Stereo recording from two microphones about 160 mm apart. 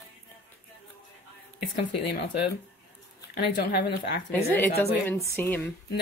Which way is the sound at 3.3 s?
85° left.